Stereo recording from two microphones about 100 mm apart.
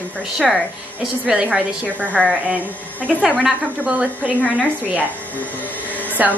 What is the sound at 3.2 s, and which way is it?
A woman's voice, 10° right (ahead or behind).